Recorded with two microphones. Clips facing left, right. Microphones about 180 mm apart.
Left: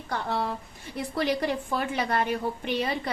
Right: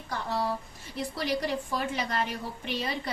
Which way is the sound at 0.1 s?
60° left (ahead or behind).